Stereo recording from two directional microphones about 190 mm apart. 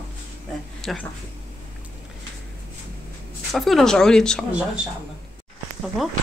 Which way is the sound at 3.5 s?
Centre (ahead or behind).